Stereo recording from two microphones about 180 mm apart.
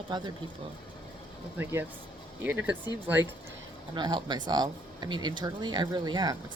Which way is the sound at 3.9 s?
25° right (ahead or behind).